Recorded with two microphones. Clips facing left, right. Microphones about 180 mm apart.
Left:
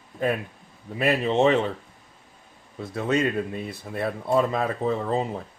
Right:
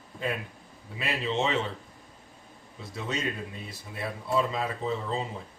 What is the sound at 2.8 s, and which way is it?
Speech, 55° left (ahead or behind).